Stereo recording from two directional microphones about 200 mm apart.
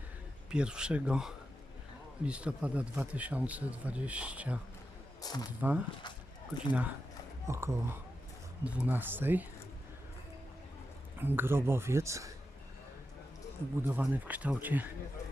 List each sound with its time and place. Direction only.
0.5 s a man's voice: 5° right (ahead or behind)
5.2 s speech: 20° left (ahead or behind)
5.5 s a man's voice: 10° right (ahead or behind)
6.0 s a sound: 20° left (ahead or behind)
7.4 s a man's voice: 15° right (ahead or behind)
11.2 s a man's voice: 10° right (ahead or behind)
13.8 s a man's voice: 10° right (ahead or behind)